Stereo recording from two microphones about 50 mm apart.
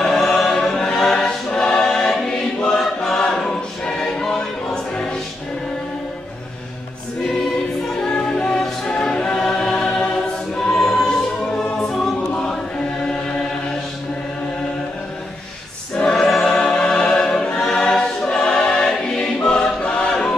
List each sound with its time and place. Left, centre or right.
0.0 s choir: centre
0.6 s choir: centre
8.0 s music: centre
9.5 s choir: centre
11.1 s music: centre
16.2 s music: centre
16.4 s choir: centre
19.8 s choir: left